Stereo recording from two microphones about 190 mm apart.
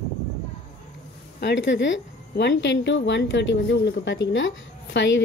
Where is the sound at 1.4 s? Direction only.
65° left (ahead or behind).